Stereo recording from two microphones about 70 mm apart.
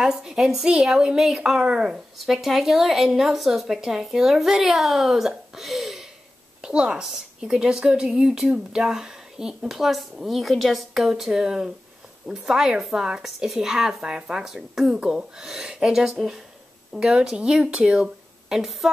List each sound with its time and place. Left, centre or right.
0.0 s a woman's voice: centre
6.6 s a woman's voice: centre